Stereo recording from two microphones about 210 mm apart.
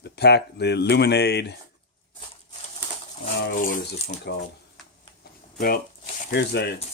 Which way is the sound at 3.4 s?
40° left (ahead or behind).